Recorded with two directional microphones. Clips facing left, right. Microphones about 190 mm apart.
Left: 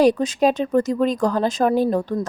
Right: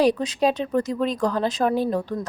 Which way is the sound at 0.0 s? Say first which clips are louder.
Left 3 dB; 45° left (ahead or behind).